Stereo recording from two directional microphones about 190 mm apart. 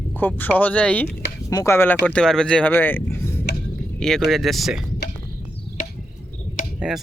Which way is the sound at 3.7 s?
Centre (ahead or behind).